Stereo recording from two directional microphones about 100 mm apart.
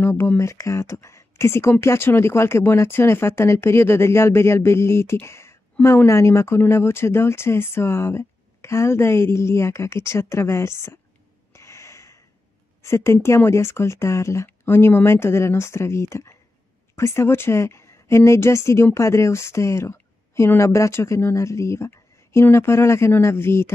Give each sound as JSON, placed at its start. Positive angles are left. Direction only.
{"t": 0.0, "sound": "speech", "side_deg": 25}
{"t": 11.5, "sound": "a sound", "side_deg": 30}
{"t": 12.8, "sound": "a woman's voice", "side_deg": 30}